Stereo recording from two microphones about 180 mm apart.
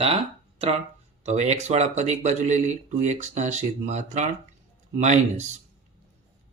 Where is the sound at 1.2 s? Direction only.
40° right (ahead or behind).